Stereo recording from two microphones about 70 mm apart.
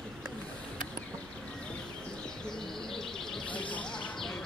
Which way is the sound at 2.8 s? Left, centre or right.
Centre.